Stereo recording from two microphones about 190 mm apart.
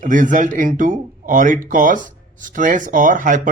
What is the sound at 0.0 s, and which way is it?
Speech, 45° right (ahead or behind).